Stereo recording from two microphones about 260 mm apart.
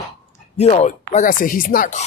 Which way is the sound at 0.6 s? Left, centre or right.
Left.